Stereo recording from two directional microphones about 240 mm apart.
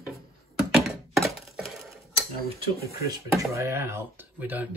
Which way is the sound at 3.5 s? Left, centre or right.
Centre.